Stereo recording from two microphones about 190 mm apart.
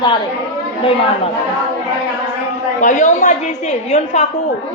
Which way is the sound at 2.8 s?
40° left (ahead or behind).